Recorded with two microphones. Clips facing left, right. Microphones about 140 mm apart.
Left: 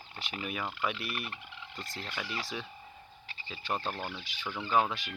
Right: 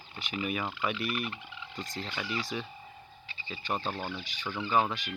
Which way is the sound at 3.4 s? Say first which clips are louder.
Right 1 dB; centre (ahead or behind).